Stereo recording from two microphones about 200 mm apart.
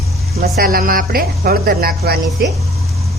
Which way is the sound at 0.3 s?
50° right (ahead or behind).